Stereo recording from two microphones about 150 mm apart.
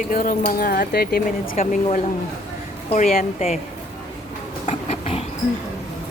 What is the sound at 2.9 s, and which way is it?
Speech, 55° left (ahead or behind).